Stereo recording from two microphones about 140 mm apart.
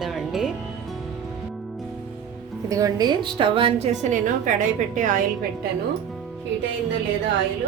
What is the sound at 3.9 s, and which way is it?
A woman's voice, 60° right (ahead or behind).